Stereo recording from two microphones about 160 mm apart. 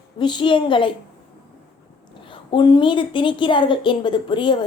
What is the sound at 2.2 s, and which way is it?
A woman's voice, 30° left (ahead or behind).